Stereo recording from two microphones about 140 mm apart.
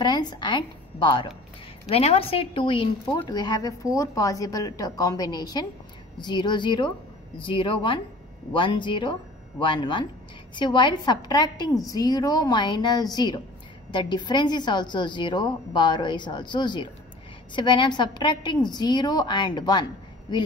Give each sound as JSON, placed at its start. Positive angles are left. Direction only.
{"t": 0.0, "sound": "a woman's voice", "side_deg": 30}
{"t": 1.9, "sound": "a woman's voice", "side_deg": 45}